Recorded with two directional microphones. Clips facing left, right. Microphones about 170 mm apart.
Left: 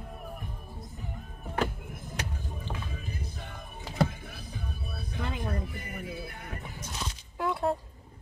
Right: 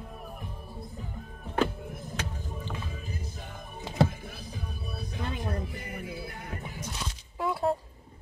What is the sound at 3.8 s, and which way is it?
Music, 25° right (ahead or behind).